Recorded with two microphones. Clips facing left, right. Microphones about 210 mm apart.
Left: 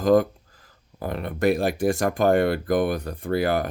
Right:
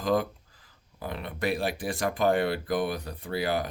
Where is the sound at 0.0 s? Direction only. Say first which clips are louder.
Left 8 dB; 45° left (ahead or behind).